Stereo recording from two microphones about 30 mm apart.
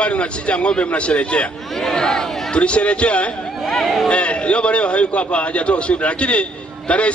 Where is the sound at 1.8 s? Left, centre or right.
Centre.